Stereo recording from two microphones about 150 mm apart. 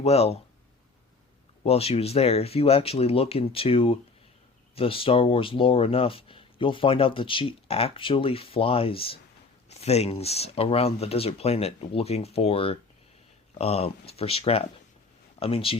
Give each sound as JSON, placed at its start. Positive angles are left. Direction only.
{"t": 0.0, "sound": "speech", "side_deg": 45}
{"t": 1.6, "sound": "speech", "side_deg": 40}